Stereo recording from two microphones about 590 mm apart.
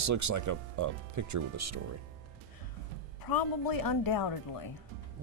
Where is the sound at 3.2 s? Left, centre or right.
Left.